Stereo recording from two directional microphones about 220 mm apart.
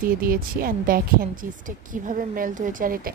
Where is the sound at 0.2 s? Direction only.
40° right (ahead or behind).